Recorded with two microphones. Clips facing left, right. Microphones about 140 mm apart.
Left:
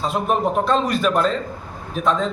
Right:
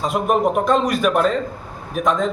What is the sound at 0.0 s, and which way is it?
A man's voice, 10° right (ahead or behind).